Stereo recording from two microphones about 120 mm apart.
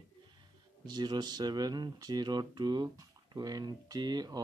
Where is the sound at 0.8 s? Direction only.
35° right (ahead or behind).